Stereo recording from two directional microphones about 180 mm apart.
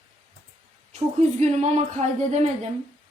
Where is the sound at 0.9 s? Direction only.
40° right (ahead or behind).